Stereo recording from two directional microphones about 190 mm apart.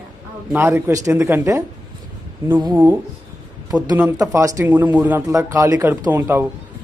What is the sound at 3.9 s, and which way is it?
A man's voice, 15° right (ahead or behind).